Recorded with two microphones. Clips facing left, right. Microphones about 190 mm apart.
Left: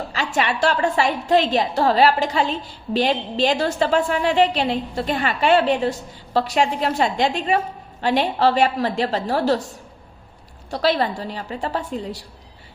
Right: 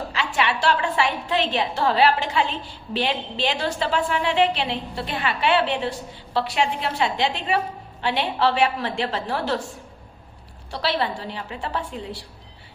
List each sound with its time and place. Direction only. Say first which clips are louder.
0.1 s a woman's voice: left 2 dB; 45° left (ahead or behind)
10.7 s a woman's voice: left 5 dB; 45° left (ahead or behind)